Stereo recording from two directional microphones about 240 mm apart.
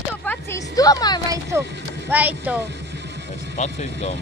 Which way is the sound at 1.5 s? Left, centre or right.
Centre.